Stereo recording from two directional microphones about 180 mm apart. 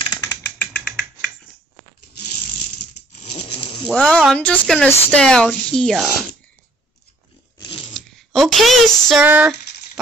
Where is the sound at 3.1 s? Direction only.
40° left (ahead or behind).